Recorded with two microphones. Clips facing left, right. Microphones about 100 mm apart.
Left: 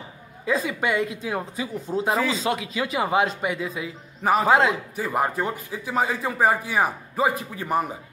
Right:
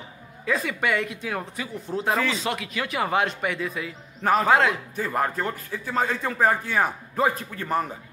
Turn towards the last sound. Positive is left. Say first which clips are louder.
# left 1 dB
turn(degrees=10)  # may be behind; listen again after turning